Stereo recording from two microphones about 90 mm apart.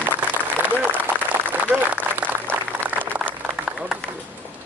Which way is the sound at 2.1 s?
20° right (ahead or behind).